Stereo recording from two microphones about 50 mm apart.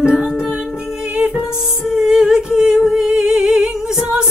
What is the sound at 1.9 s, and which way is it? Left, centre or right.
Humming, centre.